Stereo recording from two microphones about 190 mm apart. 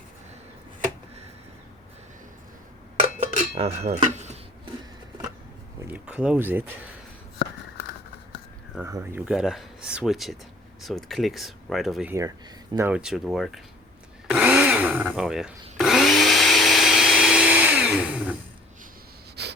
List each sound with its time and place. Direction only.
3.2 s cutlery: 35° right (ahead or behind)
5.8 s speech: 10° right (ahead or behind)
8.8 s speech: 15° right (ahead or behind)
14.3 s blender: 10° right (ahead or behind)
19.4 s wheeze: 60° right (ahead or behind)